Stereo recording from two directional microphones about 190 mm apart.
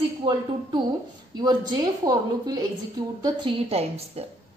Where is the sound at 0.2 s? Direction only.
25° right (ahead or behind).